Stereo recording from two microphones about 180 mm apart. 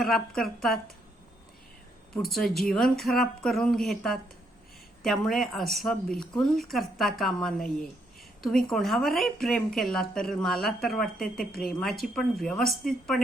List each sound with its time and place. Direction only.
0.0 s speech: centre (ahead or behind)
2.1 s speech: centre (ahead or behind)